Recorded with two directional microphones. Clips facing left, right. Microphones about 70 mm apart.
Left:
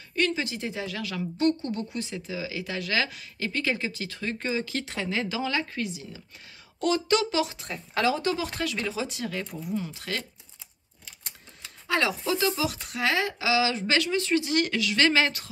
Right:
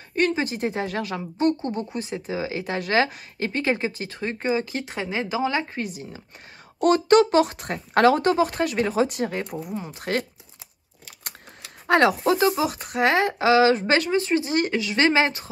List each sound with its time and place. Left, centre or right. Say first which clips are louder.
0.1 s speech: right 4 dB; right
11.9 s speech: right 8 dB; right
12.4 s speech: right 6 dB; right